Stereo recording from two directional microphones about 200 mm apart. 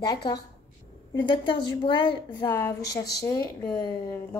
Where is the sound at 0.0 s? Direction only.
20° left (ahead or behind).